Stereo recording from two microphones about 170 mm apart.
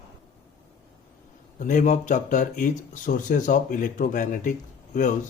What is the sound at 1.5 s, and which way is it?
Speech, 45° left (ahead or behind).